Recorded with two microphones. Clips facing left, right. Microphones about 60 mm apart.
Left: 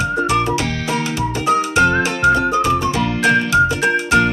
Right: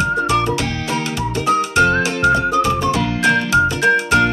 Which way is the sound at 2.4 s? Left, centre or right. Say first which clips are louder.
Even; centre.